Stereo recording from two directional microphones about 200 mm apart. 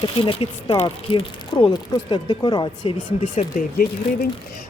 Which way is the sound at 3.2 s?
40° left (ahead or behind).